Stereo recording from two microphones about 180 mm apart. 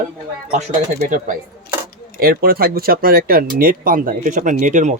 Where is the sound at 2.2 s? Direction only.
55° right (ahead or behind).